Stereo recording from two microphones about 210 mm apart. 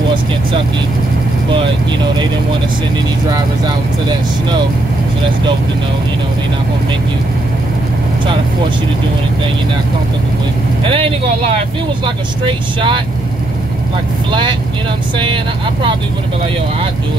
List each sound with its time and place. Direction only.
10.8 s speech: 25° right (ahead or behind)
14.3 s speech: 20° right (ahead or behind)